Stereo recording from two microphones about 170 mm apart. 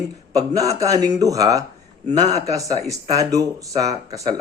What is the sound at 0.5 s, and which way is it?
Speech, 20° right (ahead or behind).